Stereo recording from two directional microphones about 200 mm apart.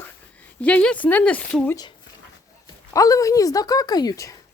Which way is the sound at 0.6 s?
5° left (ahead or behind).